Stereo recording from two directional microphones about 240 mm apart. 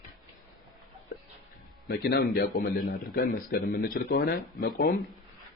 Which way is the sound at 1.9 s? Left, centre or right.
Left.